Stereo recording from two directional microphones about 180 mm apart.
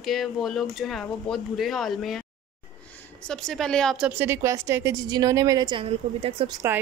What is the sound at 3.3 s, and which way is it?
A woman's voice, centre (ahead or behind).